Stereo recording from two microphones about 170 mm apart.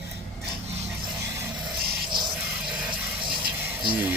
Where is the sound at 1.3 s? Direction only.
20° right (ahead or behind).